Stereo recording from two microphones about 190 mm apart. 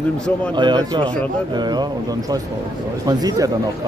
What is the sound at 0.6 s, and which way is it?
Speech, 25° right (ahead or behind).